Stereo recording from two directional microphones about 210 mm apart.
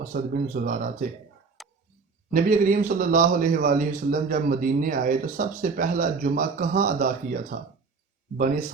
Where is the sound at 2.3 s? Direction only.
40° right (ahead or behind).